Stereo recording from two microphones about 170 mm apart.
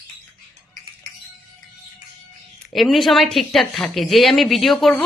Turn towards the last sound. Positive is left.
turn(degrees=0)  # may be behind; listen again after turning